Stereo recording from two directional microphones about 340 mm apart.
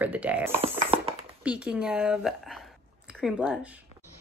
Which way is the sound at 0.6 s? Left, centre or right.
Centre.